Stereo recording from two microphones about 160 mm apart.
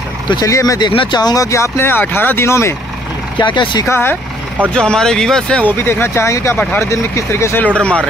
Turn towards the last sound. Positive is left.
turn(degrees=5)  # may be behind; listen again after turning